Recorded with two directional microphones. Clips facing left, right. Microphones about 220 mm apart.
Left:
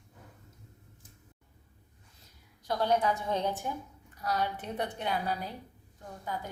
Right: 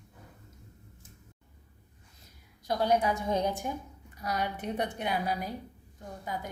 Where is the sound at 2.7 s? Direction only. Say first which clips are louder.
Right 1 dB; 10° right (ahead or behind).